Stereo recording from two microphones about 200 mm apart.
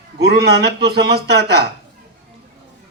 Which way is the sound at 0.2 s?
55° right (ahead or behind).